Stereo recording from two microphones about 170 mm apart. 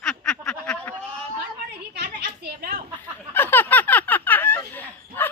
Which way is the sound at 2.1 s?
75° right (ahead or behind).